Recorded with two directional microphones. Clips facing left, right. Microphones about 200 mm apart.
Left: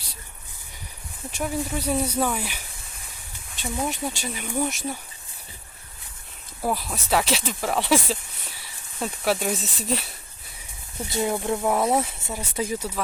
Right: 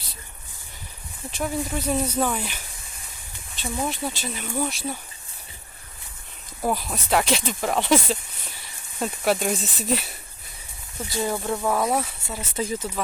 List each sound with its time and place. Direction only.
1.3 s speech: 10° left (ahead or behind)
3.6 s speech: 15° left (ahead or behind)
6.6 s speech: centre (ahead or behind)
11.1 s speech: 20° left (ahead or behind)
12.4 s speech: 10° left (ahead or behind)